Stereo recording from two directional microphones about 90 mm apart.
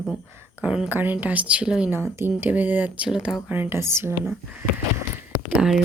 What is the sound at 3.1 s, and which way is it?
Speech, 5° right (ahead or behind).